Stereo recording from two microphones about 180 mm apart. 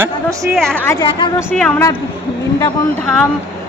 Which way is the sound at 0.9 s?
25° left (ahead or behind).